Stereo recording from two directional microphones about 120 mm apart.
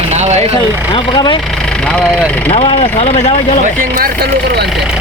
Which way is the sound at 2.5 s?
50° left (ahead or behind).